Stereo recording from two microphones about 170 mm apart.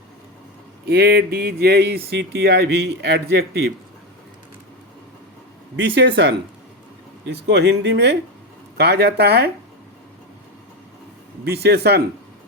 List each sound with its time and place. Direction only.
0.9 s a man's voice: 70° right (ahead or behind)
5.7 s speech: 90° right
8.8 s a man's voice: 75° right (ahead or behind)
11.4 s a man's voice: 70° right (ahead or behind)